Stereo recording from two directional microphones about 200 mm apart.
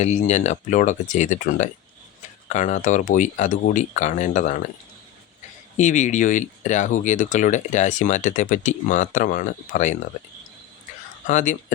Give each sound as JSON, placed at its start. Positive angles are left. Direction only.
{"t": 0.0, "sound": "speech", "side_deg": 35}
{"t": 5.7, "sound": "speech", "side_deg": 35}
{"t": 11.3, "sound": "speech", "side_deg": 40}